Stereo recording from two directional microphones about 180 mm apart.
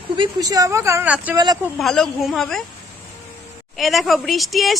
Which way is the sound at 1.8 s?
Centre (ahead or behind).